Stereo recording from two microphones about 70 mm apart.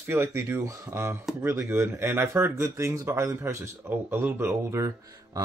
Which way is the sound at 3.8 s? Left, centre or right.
Right.